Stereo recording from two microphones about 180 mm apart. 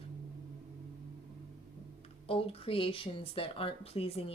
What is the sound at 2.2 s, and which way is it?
Speech, 30° left (ahead or behind).